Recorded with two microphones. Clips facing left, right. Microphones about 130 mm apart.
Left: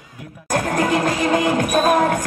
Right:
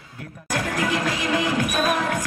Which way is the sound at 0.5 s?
40° left (ahead or behind).